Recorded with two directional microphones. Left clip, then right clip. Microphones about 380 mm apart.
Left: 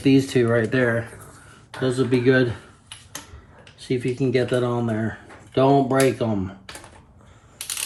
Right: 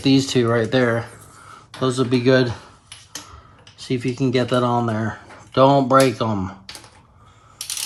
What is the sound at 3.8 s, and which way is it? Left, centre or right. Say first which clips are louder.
Speech: right 1 dB; centre.